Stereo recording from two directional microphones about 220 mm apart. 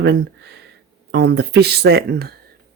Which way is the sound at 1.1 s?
50° right (ahead or behind).